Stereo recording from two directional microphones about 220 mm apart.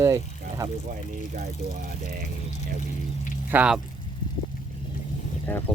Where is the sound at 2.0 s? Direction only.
40° right (ahead or behind).